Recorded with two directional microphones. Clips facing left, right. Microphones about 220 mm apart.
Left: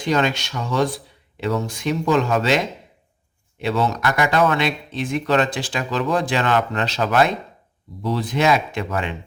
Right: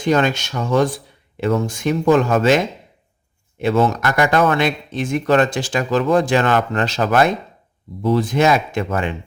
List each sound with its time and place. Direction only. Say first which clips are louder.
0.0 s speech: right 3 dB; 50° right (ahead or behind)
3.6 s speech: right 4 dB; 50° right (ahead or behind)